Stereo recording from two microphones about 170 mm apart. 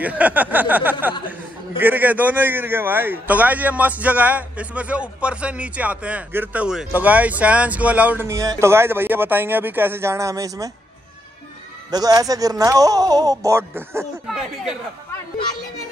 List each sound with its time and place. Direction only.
0.0 s a man's voice: 10° right (ahead or behind)
11.9 s speech: 20° right (ahead or behind)
14.2 s speech: centre (ahead or behind)